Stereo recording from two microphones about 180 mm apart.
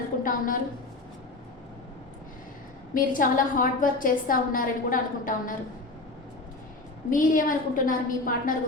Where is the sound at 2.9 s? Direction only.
50° left (ahead or behind).